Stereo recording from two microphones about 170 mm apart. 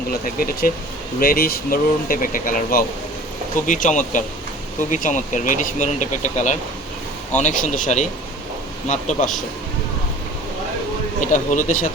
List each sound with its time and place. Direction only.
0.1 s speech: 60° left (ahead or behind); by 9.3 s 45° left (ahead or behind)
11.3 s speech: 50° left (ahead or behind)